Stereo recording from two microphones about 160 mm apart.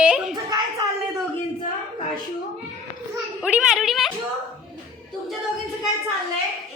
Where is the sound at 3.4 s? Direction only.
5° right (ahead or behind).